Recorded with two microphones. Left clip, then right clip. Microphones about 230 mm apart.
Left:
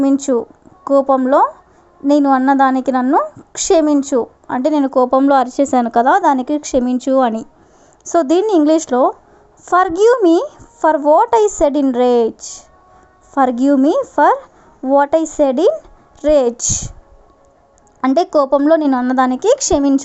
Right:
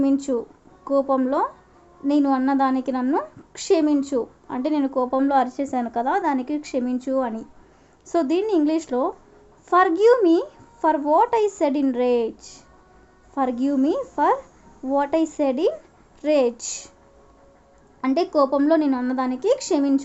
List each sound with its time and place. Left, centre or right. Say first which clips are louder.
0.0 s a woman's voice: left 7 dB; left
8.0 s a woman's voice: left 8 dB; left
18.0 s a woman's voice: left 7 dB; left